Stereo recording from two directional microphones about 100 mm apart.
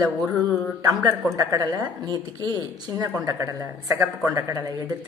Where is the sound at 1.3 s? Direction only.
40° right (ahead or behind).